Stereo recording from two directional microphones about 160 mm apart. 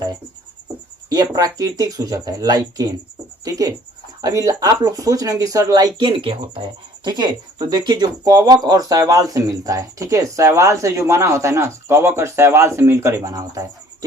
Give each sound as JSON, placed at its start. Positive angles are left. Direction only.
{"t": 1.1, "sound": "speech", "side_deg": -25}